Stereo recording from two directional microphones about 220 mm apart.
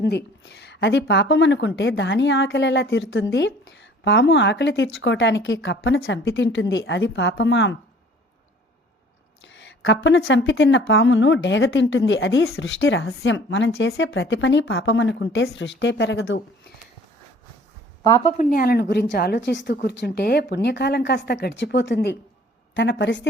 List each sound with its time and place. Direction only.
0.4 s a woman's voice: 50° left (ahead or behind)
9.4 s speech: 55° left (ahead or behind)
18.0 s a woman's voice: 20° left (ahead or behind)
18.3 s a woman's voice: 40° left (ahead or behind)